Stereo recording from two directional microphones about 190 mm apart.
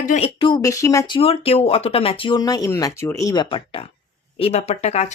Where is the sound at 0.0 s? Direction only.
35° left (ahead or behind).